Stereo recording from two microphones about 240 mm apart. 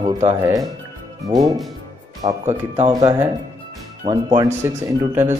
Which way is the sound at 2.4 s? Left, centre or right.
Right.